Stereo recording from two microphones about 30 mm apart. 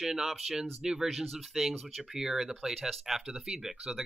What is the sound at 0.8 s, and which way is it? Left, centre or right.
Speech, right.